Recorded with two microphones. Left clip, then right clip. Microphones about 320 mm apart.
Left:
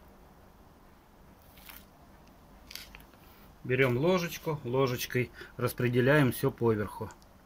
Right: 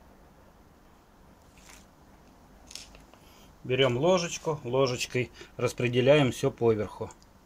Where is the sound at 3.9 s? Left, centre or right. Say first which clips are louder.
Right 4 dB; centre.